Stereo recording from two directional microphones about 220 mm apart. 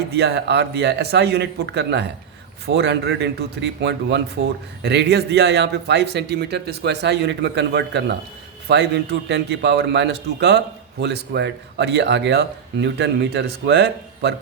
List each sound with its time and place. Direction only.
0.2 s speech: 50° right (ahead or behind)